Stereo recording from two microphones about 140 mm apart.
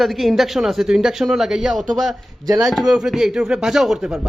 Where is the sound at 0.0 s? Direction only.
Centre (ahead or behind).